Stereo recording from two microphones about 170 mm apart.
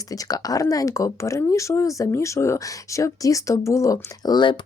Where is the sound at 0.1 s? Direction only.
20° left (ahead or behind).